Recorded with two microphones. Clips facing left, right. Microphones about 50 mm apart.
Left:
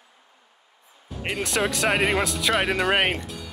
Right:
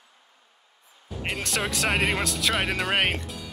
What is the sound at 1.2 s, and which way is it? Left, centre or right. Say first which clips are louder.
Speech: left 4 dB; centre.